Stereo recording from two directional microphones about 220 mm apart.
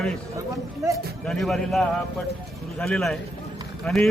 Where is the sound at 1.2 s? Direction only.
Centre (ahead or behind).